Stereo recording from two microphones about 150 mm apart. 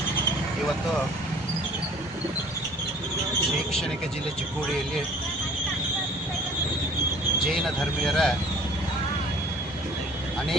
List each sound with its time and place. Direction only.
8.0 s speech: 5° left (ahead or behind)